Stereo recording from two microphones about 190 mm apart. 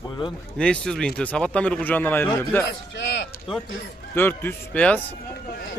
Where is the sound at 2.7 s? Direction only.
65° left (ahead or behind).